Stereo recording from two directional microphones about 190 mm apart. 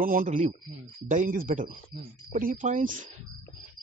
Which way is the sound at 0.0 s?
45° right (ahead or behind).